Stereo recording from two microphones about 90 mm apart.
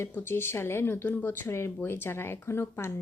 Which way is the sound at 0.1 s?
25° left (ahead or behind).